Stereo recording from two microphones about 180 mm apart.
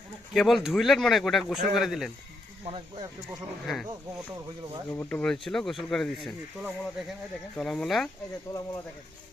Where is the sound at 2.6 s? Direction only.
30° right (ahead or behind).